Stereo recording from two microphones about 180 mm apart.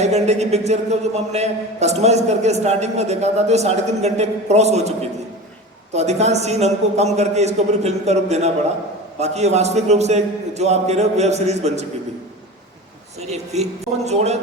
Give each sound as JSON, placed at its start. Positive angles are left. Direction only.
{"t": 0.0, "sound": "a man's voice", "side_deg": -40}
{"t": 13.2, "sound": "a man's voice", "side_deg": -35}